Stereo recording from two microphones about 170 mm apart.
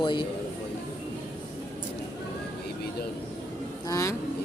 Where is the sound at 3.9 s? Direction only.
20° left (ahead or behind).